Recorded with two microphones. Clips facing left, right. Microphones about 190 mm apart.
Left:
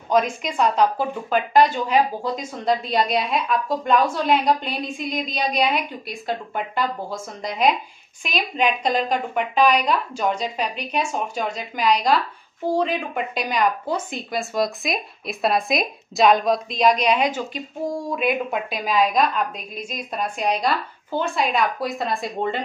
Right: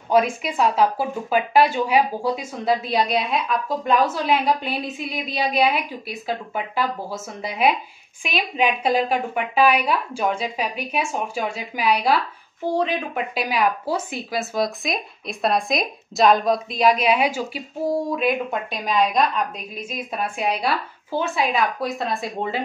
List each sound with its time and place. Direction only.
0.1 s a woman's voice: 5° right (ahead or behind)